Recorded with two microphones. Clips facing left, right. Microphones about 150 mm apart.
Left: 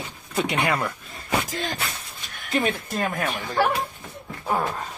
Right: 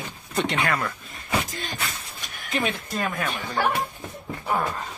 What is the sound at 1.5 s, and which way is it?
Speech, 90° left.